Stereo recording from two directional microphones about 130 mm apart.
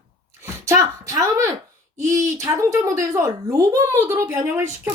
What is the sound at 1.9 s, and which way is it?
Speech, 25° right (ahead or behind).